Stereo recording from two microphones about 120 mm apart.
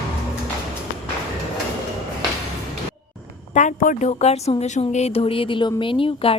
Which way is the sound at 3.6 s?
85° left.